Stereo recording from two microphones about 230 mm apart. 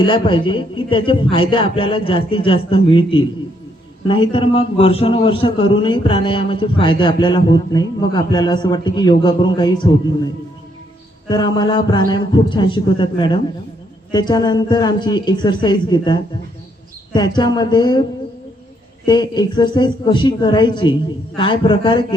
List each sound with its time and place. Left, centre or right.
0.0 s a man's voice: left
11.3 s a man's voice: centre
19.0 s a man's voice: centre